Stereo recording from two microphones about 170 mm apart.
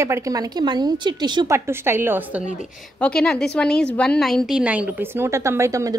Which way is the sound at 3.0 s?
5° left (ahead or behind).